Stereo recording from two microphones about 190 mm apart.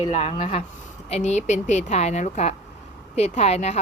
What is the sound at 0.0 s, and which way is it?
Speech, 30° left (ahead or behind).